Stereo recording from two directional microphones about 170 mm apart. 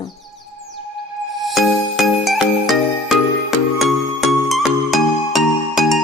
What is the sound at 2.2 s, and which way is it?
Music, centre (ahead or behind).